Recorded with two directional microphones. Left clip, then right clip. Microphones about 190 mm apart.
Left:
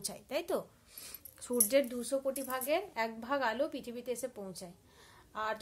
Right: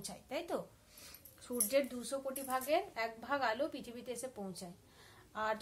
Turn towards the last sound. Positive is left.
turn(degrees=45)  # may be behind; listen again after turning